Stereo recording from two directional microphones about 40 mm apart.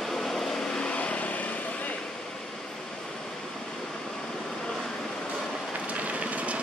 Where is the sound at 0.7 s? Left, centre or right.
Left.